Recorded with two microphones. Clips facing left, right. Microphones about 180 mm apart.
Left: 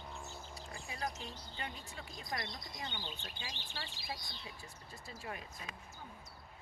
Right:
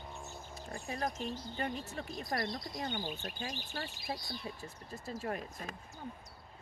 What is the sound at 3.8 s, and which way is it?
Speech, 50° right (ahead or behind).